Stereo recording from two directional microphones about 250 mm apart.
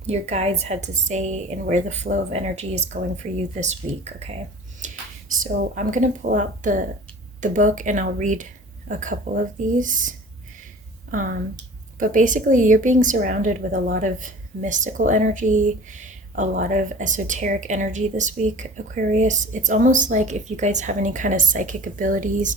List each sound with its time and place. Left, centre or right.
0.1 s speech: right
5.3 s a woman's voice: right